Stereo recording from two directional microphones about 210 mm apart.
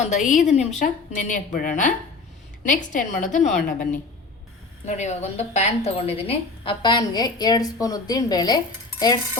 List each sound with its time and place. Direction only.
0.0 s a woman's voice: 35° left (ahead or behind); by 9.4 s 20° left (ahead or behind)